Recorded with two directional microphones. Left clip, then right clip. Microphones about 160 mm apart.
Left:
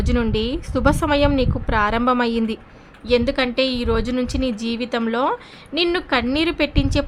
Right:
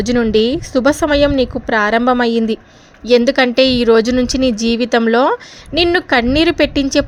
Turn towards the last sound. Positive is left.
turn(degrees=-40)  # may be behind; listen again after turning